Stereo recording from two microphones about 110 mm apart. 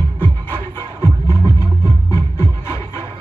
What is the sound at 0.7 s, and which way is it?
Music, 25° left (ahead or behind).